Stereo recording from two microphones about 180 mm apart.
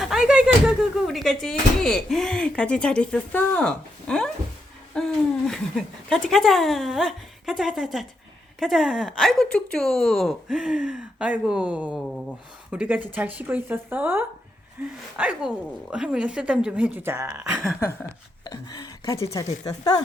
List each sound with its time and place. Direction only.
0.0 s speech: 5° right (ahead or behind)
18.4 s speech: 20° left (ahead or behind)